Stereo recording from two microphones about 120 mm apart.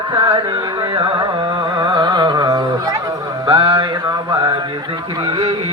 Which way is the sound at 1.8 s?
40° right (ahead or behind).